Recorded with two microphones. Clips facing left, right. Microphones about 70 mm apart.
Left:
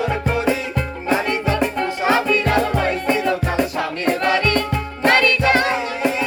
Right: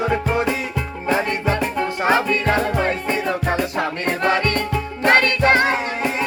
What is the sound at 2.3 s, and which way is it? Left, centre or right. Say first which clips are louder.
Music: left 2 dB; right.